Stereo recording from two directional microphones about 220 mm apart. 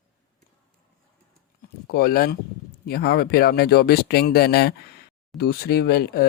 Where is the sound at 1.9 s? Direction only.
45° left (ahead or behind).